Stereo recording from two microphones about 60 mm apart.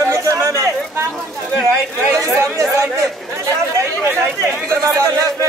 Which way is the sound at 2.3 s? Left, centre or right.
Right.